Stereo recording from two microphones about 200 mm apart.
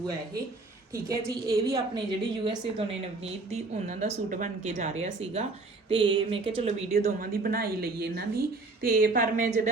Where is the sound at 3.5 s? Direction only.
35° right (ahead or behind).